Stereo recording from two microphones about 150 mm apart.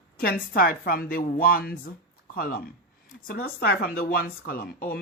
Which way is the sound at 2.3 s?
75° left (ahead or behind).